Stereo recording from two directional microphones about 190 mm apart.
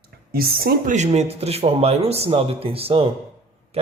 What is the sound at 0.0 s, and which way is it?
Speech, 55° right (ahead or behind).